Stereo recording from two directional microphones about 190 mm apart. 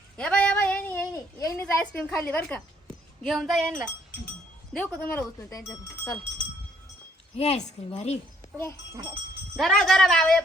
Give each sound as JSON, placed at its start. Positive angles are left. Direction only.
{"t": 0.2, "sound": "a sound", "side_deg": 5}
{"t": 4.7, "sound": "speech", "side_deg": 5}
{"t": 7.3, "sound": "a woman's voice", "side_deg": 35}
{"t": 8.5, "sound": "speech", "side_deg": 10}
{"t": 9.6, "sound": "speech", "side_deg": 0}